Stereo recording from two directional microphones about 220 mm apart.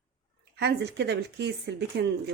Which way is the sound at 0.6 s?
50° right (ahead or behind).